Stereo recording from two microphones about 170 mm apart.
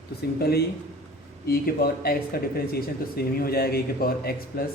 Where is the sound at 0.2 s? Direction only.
65° left (ahead or behind).